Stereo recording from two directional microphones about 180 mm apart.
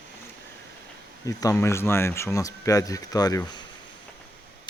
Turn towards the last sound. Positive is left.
turn(degrees=20)  # may be behind; listen again after turning